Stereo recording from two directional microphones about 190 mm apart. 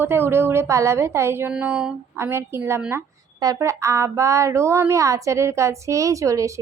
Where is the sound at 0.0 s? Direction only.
10° right (ahead or behind).